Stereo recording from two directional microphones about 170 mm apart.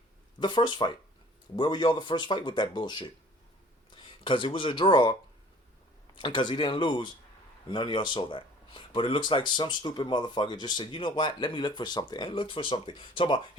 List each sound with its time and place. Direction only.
0.3 s speech: 25° left (ahead or behind)
6.1 s speech: 30° left (ahead or behind)